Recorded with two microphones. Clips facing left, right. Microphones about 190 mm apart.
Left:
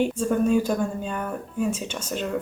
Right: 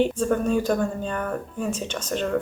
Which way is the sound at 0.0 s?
10° left (ahead or behind).